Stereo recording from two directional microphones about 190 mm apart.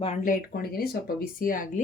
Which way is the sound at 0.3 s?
50° left (ahead or behind).